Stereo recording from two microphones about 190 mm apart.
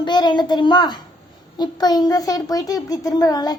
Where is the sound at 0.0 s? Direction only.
25° left (ahead or behind).